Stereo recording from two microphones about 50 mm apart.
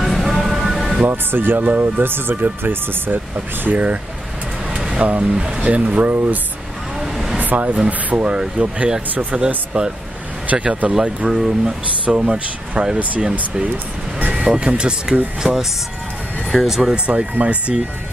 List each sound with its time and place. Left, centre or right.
0.0 s vehicle: centre
1.0 s speech: right
2.3 s speech: right
7.0 s vehicle: centre
7.3 s speech: right
11.2 s speech: centre
14.3 s vehicle: centre
14.7 s speech: centre
16.6 s speech: centre
16.9 s speech: right